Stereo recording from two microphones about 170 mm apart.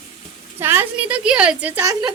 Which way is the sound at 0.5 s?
15° right (ahead or behind).